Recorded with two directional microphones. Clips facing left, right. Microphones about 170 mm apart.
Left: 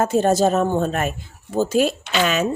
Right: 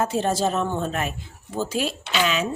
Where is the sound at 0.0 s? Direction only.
45° left (ahead or behind).